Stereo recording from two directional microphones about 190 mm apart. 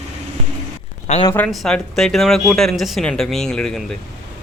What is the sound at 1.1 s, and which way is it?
Speech, 30° left (ahead or behind).